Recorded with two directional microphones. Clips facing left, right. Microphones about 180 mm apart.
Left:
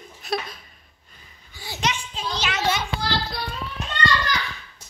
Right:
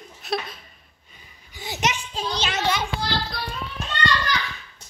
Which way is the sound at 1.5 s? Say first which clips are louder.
Right 1 dB; 20° right (ahead or behind).